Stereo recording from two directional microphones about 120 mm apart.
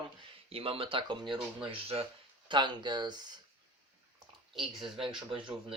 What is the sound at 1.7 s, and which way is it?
Speech, 55° right (ahead or behind).